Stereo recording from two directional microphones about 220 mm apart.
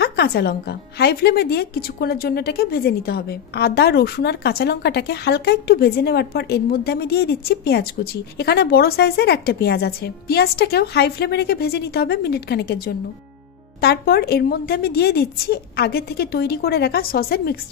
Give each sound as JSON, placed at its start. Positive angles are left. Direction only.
{"t": 0.0, "sound": "a woman's voice", "side_deg": 45}